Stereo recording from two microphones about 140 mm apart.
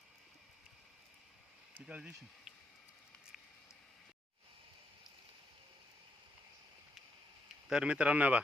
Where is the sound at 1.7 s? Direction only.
10° right (ahead or behind).